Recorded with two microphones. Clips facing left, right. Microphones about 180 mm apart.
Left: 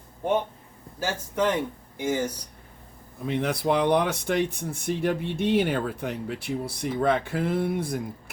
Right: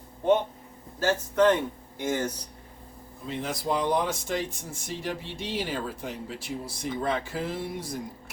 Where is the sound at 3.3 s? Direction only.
65° left (ahead or behind).